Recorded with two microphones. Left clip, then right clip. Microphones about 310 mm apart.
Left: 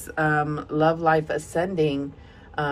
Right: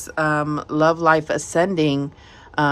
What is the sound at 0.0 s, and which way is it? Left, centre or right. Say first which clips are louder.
Speech: right 2 dB; centre.